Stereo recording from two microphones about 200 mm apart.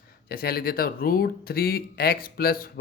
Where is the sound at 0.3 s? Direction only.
50° left (ahead or behind).